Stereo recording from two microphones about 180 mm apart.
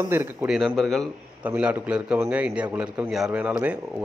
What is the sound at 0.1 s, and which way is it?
Speech, 10° right (ahead or behind).